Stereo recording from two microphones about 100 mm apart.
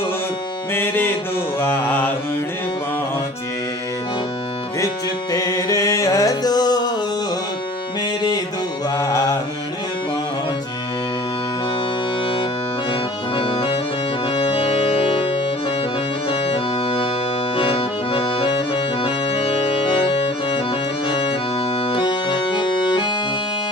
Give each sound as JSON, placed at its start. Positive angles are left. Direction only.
{"t": 0.7, "sound": "music", "side_deg": 20}
{"t": 1.5, "sound": "mantra", "side_deg": 20}
{"t": 5.3, "sound": "music", "side_deg": 35}
{"t": 9.0, "sound": "carnatic music", "side_deg": 30}
{"t": 12.9, "sound": "music", "side_deg": 65}
{"t": 16.3, "sound": "accordion", "side_deg": 75}
{"t": 21.8, "sound": "accordion", "side_deg": 55}